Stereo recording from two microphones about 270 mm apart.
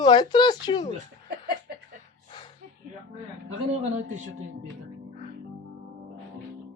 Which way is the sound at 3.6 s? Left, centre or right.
Right.